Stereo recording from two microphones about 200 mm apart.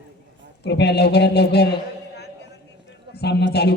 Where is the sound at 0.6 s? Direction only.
55° left (ahead or behind).